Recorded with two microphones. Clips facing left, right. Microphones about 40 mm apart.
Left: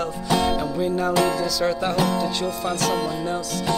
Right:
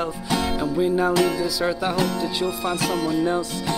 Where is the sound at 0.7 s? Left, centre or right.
Centre.